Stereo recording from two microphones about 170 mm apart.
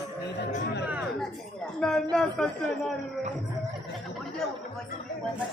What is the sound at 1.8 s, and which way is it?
Speech, 5° left (ahead or behind).